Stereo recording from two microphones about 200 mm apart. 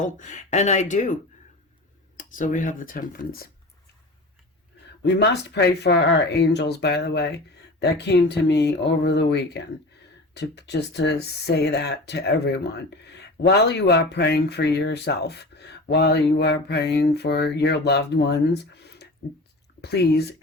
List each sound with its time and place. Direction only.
0.2 s speech: 40° left (ahead or behind)
2.1 s speech: 40° left (ahead or behind)
5.0 s speech: 60° left (ahead or behind)